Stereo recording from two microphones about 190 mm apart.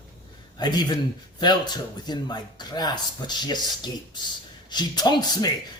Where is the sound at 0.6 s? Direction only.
20° left (ahead or behind).